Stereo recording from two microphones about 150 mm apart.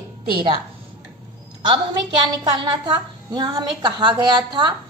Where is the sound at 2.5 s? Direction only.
30° right (ahead or behind).